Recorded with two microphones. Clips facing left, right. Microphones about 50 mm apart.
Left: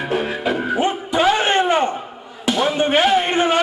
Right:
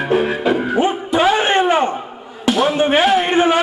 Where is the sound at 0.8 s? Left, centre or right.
Centre.